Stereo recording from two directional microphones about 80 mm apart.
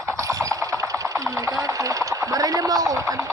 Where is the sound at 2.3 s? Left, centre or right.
Right.